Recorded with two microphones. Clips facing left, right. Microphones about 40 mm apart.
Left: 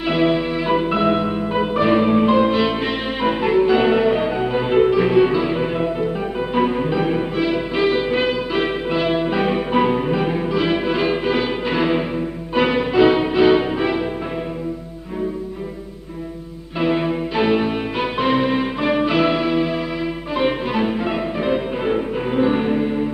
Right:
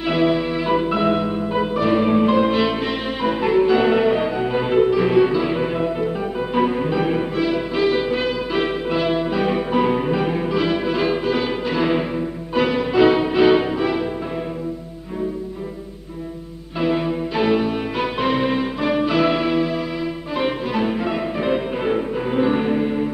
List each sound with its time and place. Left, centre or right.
0.0 s music: centre
4.7 s music: left
5.0 s music: centre
7.3 s music: centre
9.8 s music: centre
10.7 s music: centre
12.9 s music: centre
13.7 s music: centre
16.8 s music: centre